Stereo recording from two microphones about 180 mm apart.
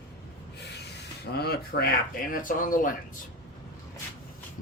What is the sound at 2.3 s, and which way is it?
Speech, 50° left (ahead or behind).